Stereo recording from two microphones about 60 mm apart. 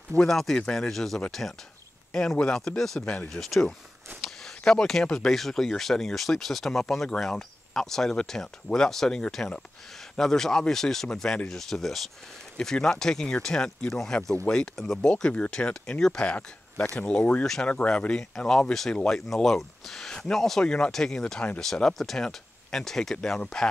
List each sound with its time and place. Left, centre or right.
0.2 s speech: centre
2.4 s speech: centre
3.0 s speech: left
3.3 s speech: centre